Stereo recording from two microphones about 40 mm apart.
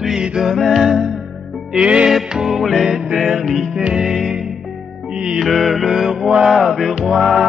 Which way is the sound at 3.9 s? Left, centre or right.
Centre.